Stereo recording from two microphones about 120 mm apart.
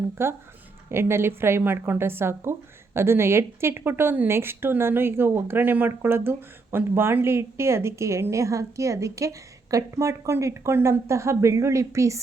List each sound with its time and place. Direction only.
0.2 s a woman's voice: 20° right (ahead or behind)